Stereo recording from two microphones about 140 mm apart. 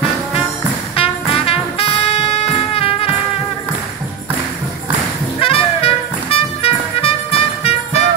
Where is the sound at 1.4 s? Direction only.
45° left (ahead or behind).